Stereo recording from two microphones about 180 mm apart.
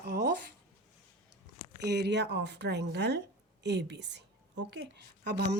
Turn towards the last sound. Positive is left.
turn(degrees=-65)  # may be behind; listen again after turning